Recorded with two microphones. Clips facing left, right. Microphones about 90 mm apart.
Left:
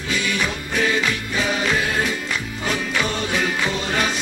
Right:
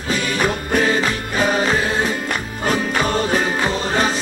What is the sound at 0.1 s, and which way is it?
Music, 40° right (ahead or behind).